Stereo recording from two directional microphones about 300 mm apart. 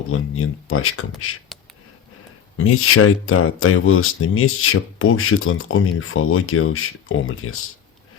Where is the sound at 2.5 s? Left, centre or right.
Left.